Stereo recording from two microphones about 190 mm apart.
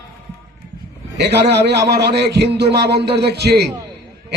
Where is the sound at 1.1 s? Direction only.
60° right (ahead or behind).